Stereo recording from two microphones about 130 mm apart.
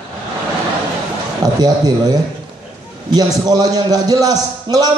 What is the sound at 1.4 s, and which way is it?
A man's voice, 30° right (ahead or behind).